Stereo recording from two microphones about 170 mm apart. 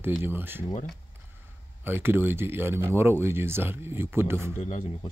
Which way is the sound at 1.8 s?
10° right (ahead or behind).